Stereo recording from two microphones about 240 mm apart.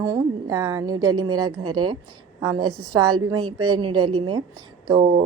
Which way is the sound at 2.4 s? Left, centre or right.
Centre.